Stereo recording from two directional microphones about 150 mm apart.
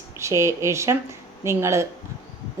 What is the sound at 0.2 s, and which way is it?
Speech, 20° right (ahead or behind).